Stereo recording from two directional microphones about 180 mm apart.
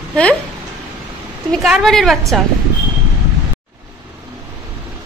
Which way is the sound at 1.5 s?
Centre (ahead or behind).